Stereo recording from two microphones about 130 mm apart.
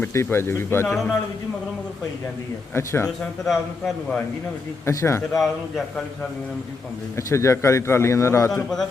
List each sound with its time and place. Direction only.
0.0 s a man's voice: 20° left (ahead or behind)
2.7 s a man's voice: 20° left (ahead or behind)
3.4 s a man's voice: centre (ahead or behind)
4.9 s a man's voice: 20° left (ahead or behind)
5.4 s a man's voice: centre (ahead or behind)
7.2 s a man's voice: 20° left (ahead or behind)